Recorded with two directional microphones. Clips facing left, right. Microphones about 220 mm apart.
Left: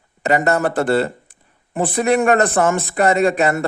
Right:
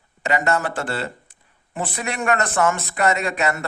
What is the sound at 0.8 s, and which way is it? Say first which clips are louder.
Speech: left 10 dB; 55° left (ahead or behind).